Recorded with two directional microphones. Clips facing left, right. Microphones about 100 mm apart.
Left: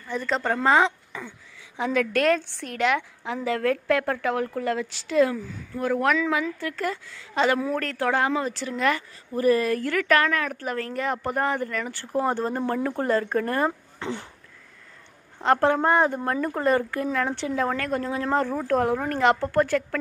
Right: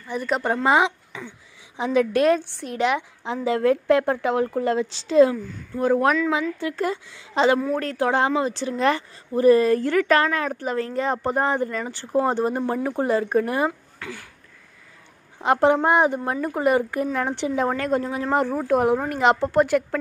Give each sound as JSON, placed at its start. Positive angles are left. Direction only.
{"t": 0.1, "sound": "a woman's voice", "side_deg": -15}
{"t": 13.9, "sound": "a sound", "side_deg": 25}
{"t": 15.3, "sound": "a woman's voice", "side_deg": -15}